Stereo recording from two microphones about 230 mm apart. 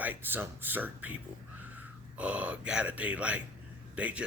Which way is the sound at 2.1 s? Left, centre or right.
Centre.